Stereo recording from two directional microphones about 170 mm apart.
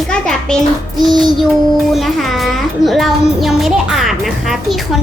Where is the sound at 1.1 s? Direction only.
25° right (ahead or behind).